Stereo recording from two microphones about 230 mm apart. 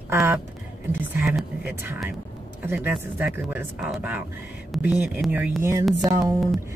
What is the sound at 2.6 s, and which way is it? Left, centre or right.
Speech, centre.